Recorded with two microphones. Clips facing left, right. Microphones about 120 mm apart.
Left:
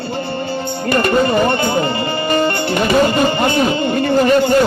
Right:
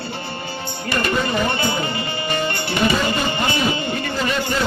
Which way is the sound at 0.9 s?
50° left (ahead or behind).